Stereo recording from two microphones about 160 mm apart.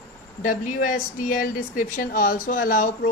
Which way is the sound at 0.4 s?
55° left (ahead or behind).